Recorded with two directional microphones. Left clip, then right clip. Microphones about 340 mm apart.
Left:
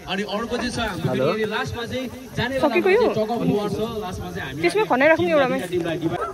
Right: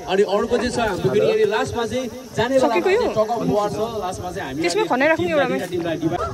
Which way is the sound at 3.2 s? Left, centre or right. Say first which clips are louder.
Right 3 dB; right.